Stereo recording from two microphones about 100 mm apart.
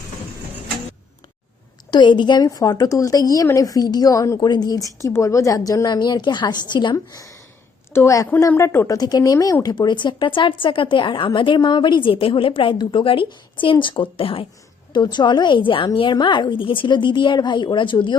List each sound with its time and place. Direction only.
1.9 s a woman's voice: 50° left (ahead or behind)
2.5 s a woman's voice: 35° left (ahead or behind)
6.9 s a woman's voice: 35° left (ahead or behind)
9.0 s a woman's voice: 40° left (ahead or behind)
9.7 s a woman's voice: 50° left (ahead or behind); by 14.4 s 65° left (ahead or behind)
14.9 s a woman's voice: 50° left (ahead or behind)